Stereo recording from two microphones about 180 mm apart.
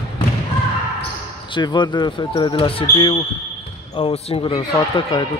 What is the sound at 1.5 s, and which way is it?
Speech, 25° left (ahead or behind).